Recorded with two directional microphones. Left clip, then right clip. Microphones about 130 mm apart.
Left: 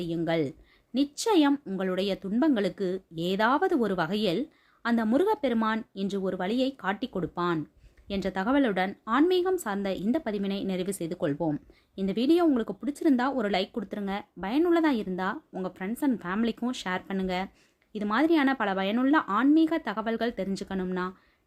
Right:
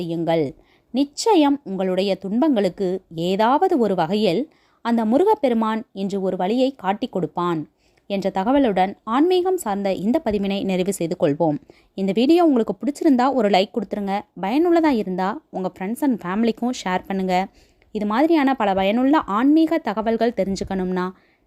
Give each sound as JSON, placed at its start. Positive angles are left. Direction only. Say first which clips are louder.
{"t": 0.0, "sound": "a woman's voice", "louder": "right 7 dB", "side_deg": -45}